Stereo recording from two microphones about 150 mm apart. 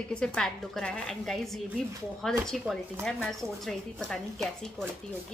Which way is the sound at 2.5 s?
5° left (ahead or behind).